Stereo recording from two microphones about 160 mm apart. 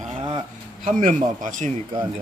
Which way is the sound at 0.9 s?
50° right (ahead or behind).